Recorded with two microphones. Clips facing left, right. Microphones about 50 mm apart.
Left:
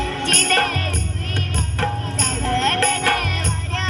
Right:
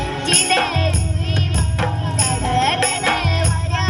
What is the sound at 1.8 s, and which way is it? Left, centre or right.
Music, centre.